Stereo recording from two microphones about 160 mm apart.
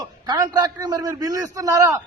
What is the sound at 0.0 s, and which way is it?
A man's voice, 25° right (ahead or behind).